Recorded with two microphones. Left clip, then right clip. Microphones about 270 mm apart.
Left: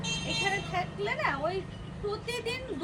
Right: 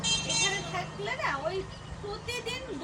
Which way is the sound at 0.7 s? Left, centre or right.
Centre.